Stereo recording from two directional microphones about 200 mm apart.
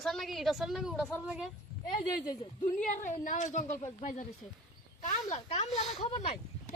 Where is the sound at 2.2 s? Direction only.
20° left (ahead or behind).